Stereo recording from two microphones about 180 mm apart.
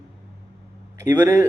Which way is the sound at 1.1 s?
15° right (ahead or behind).